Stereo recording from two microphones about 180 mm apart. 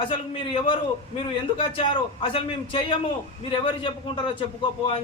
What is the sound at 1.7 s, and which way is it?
A man's voice, 30° left (ahead or behind).